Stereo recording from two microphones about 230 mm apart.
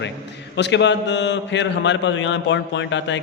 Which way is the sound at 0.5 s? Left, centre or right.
Left.